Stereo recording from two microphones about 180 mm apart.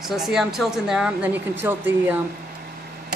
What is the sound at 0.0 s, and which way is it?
Speech, centre (ahead or behind).